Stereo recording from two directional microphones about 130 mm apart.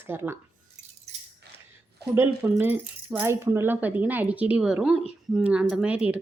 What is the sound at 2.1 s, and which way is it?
Speech, 15° right (ahead or behind).